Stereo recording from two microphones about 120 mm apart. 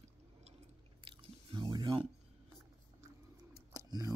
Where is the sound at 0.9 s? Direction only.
40° right (ahead or behind).